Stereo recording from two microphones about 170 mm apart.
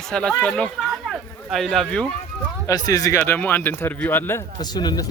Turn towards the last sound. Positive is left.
turn(degrees=25)  # may be behind; listen again after turning